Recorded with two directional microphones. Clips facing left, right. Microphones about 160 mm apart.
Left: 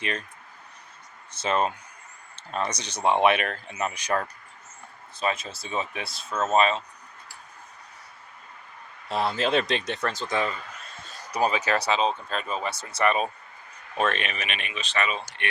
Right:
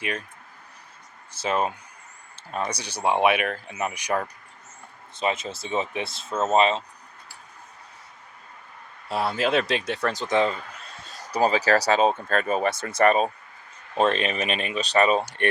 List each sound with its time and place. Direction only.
0.0 s speech: 10° right (ahead or behind)
1.3 s speech: 10° right (ahead or behind)
5.2 s speech: 20° right (ahead or behind)
9.0 s speech: 10° right (ahead or behind)
11.3 s speech: 35° right (ahead or behind)
11.9 s speech: 50° right (ahead or behind)
13.9 s speech: 30° right (ahead or behind)